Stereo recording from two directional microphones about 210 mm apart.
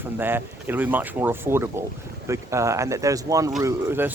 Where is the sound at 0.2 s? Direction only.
10° right (ahead or behind).